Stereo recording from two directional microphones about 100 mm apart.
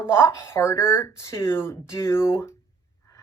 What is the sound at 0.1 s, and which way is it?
Speech, 25° left (ahead or behind).